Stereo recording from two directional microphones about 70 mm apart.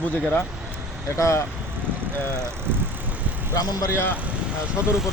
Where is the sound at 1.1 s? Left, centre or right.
Left.